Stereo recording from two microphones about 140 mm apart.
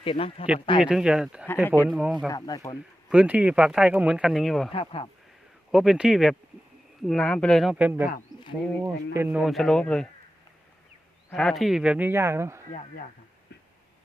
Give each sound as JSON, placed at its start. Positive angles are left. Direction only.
{"t": 0.0, "sound": "speech", "side_deg": 40}
{"t": 0.8, "sound": "speech", "side_deg": -5}
{"t": 1.6, "sound": "speech", "side_deg": 15}
{"t": 1.9, "sound": "speech", "side_deg": -10}
{"t": 2.3, "sound": "speech", "side_deg": 25}
{"t": 3.1, "sound": "speech", "side_deg": -10}
{"t": 4.7, "sound": "speech", "side_deg": 40}
{"t": 5.7, "sound": "speech", "side_deg": -5}
{"t": 9.4, "sound": "speech", "side_deg": 0}
{"t": 11.3, "sound": "speech", "side_deg": 5}